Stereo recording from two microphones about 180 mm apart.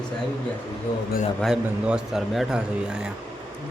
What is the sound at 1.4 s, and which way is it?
A man's voice, 5° right (ahead or behind).